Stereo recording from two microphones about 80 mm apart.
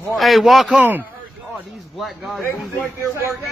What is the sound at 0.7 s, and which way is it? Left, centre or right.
Speech, right.